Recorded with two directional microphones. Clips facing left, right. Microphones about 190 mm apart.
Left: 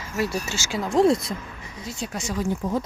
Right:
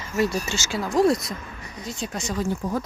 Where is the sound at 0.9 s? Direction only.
25° left (ahead or behind).